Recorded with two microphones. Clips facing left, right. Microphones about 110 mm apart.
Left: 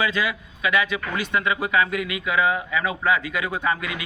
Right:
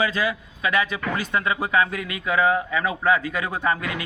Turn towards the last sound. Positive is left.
turn(degrees=-40)  # may be behind; listen again after turning